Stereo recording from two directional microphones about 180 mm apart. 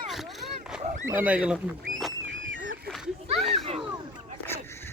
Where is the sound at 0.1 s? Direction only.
Centre (ahead or behind).